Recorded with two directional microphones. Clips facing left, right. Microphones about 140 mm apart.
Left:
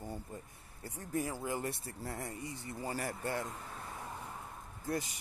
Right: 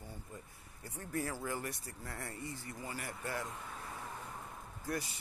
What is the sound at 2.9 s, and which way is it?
Speech, 35° left (ahead or behind).